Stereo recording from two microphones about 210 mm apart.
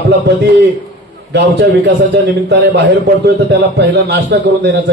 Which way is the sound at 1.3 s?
55° right (ahead or behind).